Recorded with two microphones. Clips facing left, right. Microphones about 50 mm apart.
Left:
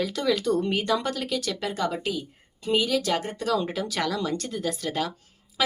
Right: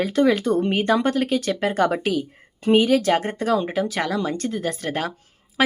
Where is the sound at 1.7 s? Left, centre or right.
Right.